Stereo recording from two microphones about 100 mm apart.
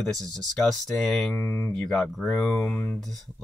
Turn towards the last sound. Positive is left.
turn(degrees=15)  # may be behind; listen again after turning